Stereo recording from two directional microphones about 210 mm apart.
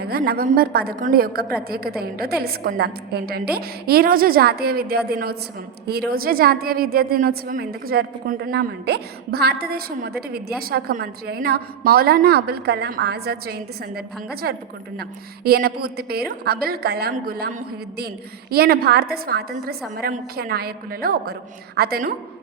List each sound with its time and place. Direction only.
0.0 s a woman's voice: 45° right (ahead or behind)
18.5 s a woman's voice: 50° right (ahead or behind)